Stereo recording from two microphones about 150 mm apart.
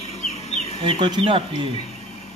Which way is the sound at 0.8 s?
35° right (ahead or behind).